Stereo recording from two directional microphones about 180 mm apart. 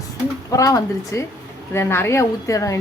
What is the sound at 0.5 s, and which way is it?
A woman's voice, 20° left (ahead or behind).